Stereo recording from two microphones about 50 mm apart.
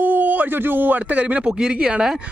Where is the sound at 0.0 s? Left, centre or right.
Right.